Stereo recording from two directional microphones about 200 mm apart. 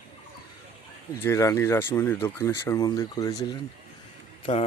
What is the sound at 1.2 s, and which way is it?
Speech, 15° left (ahead or behind).